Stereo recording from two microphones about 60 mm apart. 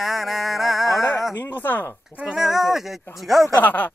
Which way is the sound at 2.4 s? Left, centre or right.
Centre.